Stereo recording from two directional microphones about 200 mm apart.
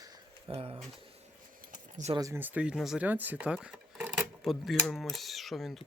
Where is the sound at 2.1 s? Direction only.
15° right (ahead or behind).